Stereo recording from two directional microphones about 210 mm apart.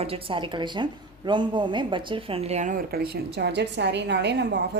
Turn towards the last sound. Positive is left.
turn(degrees=-55)  # may be behind; listen again after turning